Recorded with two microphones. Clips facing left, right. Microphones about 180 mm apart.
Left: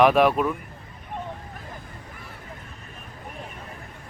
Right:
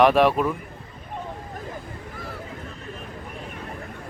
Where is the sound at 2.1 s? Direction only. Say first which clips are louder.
Right 7 dB; 90° right.